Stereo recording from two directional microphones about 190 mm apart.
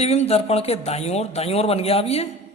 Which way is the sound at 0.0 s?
35° left (ahead or behind).